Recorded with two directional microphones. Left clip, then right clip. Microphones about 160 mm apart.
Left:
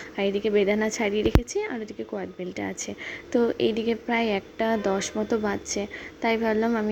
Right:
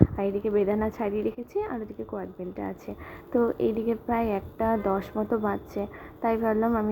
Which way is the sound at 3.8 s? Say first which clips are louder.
Left 2 dB; 35° left (ahead or behind).